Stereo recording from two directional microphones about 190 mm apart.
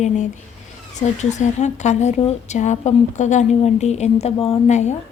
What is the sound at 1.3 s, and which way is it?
A woman's voice, 40° left (ahead or behind).